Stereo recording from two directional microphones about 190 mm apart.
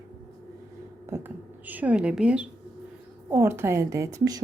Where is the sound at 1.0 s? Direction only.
10° right (ahead or behind).